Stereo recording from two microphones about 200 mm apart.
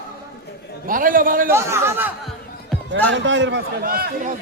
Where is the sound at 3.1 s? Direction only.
65° right (ahead or behind).